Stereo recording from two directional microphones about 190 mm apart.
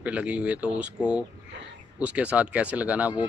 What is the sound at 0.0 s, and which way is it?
Speech, 5° right (ahead or behind).